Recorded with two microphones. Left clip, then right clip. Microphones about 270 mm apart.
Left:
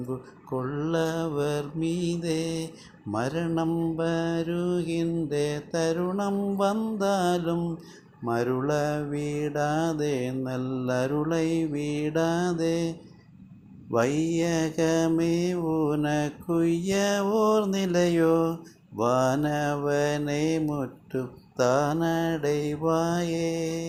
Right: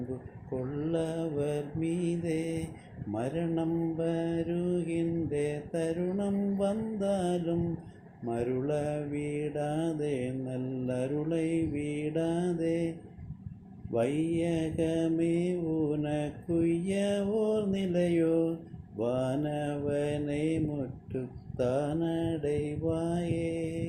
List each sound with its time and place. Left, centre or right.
0.9 s mantra: left
13.9 s mantra: centre